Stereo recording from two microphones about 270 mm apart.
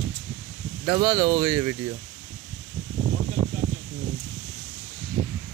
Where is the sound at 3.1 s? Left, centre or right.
Right.